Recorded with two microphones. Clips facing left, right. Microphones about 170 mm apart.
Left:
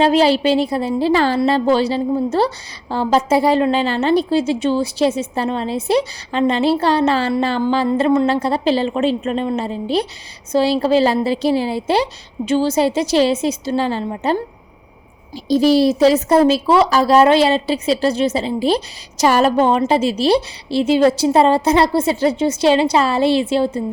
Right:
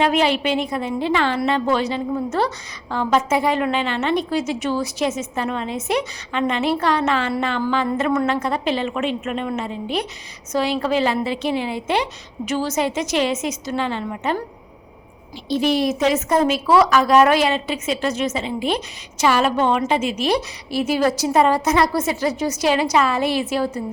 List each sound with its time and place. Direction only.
0.0 s a woman's voice: 35° left (ahead or behind)
15.4 s a woman's voice: 40° left (ahead or behind)